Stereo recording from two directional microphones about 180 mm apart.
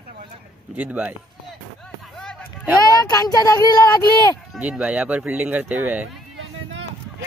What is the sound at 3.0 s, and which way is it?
Speech, 20° left (ahead or behind).